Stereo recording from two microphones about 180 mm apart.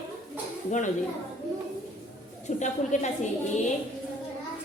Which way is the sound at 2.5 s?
40° left (ahead or behind).